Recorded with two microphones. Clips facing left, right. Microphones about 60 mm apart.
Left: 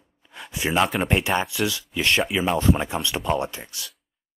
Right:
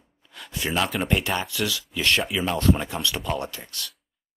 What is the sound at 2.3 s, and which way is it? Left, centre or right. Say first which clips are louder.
Speech: left 2 dB; centre.